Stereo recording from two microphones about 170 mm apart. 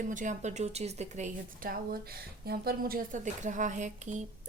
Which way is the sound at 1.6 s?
60° right (ahead or behind).